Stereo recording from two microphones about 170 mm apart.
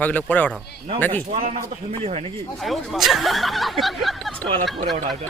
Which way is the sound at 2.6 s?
Centre (ahead or behind).